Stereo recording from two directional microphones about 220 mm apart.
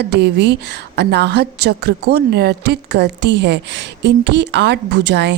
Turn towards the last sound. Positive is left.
turn(degrees=-50)  # may be behind; listen again after turning